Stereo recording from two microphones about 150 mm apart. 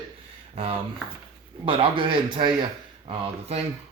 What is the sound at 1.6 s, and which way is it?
Speech, 35° right (ahead or behind).